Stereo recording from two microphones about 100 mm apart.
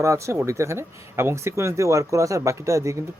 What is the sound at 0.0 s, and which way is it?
Speech, 30° right (ahead or behind).